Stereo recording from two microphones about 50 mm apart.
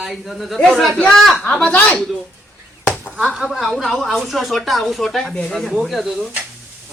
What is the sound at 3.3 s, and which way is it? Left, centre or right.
Speech, centre.